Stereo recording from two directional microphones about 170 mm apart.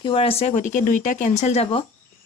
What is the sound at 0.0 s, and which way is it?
Speech, 30° left (ahead or behind).